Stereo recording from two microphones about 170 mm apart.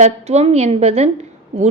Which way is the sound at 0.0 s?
40° right (ahead or behind).